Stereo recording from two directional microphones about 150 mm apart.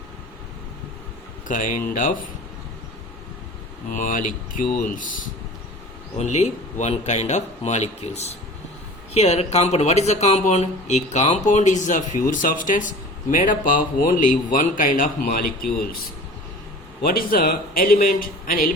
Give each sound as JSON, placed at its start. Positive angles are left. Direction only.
{"t": 1.5, "sound": "speech", "side_deg": 65}
{"t": 3.9, "sound": "speech", "side_deg": 60}
{"t": 6.1, "sound": "speech", "side_deg": 45}
{"t": 17.0, "sound": "a man's voice", "side_deg": 75}